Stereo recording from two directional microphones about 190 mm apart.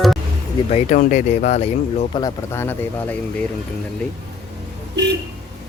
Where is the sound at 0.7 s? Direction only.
40° left (ahead or behind).